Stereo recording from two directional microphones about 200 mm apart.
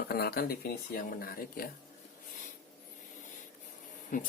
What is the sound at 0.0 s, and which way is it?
Speech, 50° left (ahead or behind).